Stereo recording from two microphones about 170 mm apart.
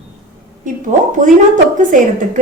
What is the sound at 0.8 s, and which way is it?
A woman's voice, 50° right (ahead or behind).